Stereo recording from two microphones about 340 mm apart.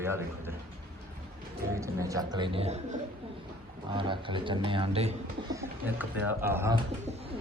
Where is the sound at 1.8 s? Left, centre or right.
Centre.